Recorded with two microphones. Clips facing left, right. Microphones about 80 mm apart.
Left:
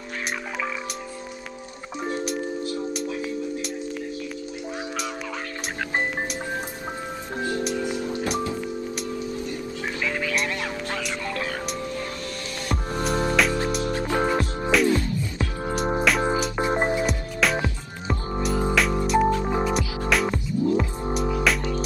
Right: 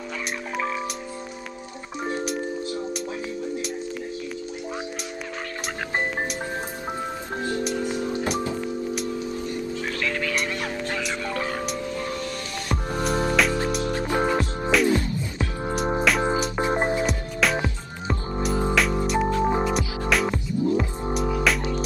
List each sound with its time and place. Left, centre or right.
7.8 s music: right
10.0 s music: centre
12.6 s music: centre
13.8 s music: centre
14.2 s music: centre